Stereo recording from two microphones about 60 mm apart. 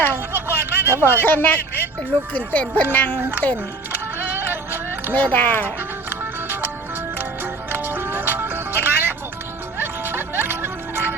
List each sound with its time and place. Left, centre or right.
0.3 s a sound: right
1.2 s speech: left
3.9 s music: right
5.1 s speech: left
6.1 s music: right
7.7 s music: right